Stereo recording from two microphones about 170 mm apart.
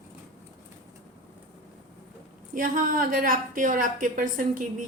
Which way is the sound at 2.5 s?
55° right (ahead or behind).